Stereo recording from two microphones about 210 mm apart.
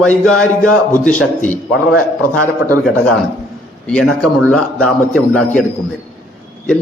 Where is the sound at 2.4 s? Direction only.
15° right (ahead or behind).